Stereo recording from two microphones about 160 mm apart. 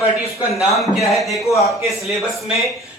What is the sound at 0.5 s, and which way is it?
Speech, centre (ahead or behind).